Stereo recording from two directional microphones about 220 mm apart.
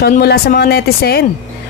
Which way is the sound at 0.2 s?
45° left (ahead or behind).